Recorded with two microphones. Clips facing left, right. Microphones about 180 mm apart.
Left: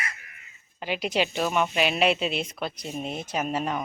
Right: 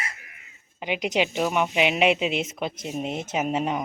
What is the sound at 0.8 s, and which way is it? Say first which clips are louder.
A woman's voice: right 2 dB; 15° right (ahead or behind).